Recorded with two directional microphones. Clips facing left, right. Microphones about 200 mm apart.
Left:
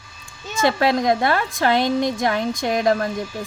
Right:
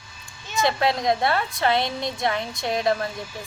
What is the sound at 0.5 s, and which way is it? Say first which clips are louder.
Speech: left 4 dB; 50° left (ahead or behind).